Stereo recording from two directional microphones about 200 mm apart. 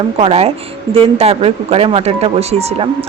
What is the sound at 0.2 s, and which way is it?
A woman's voice, 30° right (ahead or behind).